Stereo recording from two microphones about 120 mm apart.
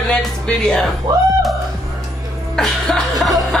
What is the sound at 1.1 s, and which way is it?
Music, 30° right (ahead or behind).